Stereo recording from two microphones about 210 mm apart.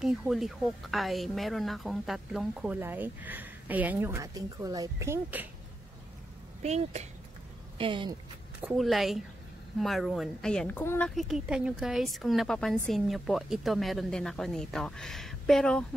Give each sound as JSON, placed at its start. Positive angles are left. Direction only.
{"t": 0.0, "sound": "speech", "side_deg": 0}
{"t": 6.6, "sound": "speech", "side_deg": -30}
{"t": 8.5, "sound": "a woman's voice", "side_deg": -5}
{"t": 11.1, "sound": "a woman's voice", "side_deg": 0}